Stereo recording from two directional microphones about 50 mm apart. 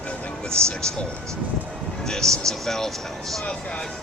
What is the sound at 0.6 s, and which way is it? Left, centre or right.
Speech, centre.